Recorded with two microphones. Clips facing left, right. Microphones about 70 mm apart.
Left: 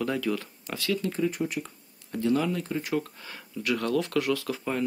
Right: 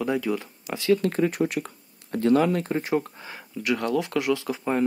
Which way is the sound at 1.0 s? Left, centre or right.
Right.